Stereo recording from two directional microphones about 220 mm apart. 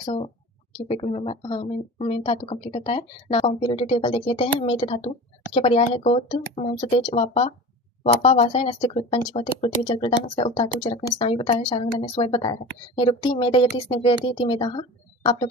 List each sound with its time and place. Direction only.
0.0 s speech: 20° left (ahead or behind)